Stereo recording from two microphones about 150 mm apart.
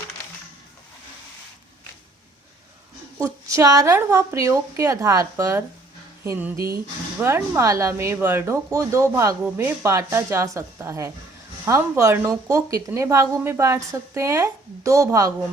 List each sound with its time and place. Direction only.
3.2 s a woman's voice: 20° right (ahead or behind)